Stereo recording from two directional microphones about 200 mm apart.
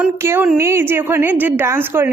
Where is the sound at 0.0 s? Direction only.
10° right (ahead or behind).